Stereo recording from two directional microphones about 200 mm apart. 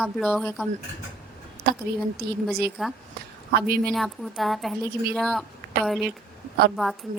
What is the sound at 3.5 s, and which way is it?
Speech, 50° right (ahead or behind).